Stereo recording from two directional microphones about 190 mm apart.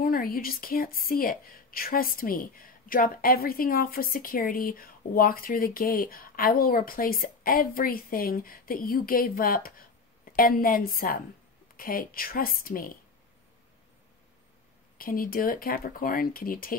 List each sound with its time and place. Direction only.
0.0 s speech: 50° left (ahead or behind)
15.0 s speech: 50° left (ahead or behind)